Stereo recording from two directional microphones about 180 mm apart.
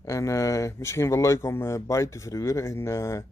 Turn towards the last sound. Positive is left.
turn(degrees=15)  # may be behind; listen again after turning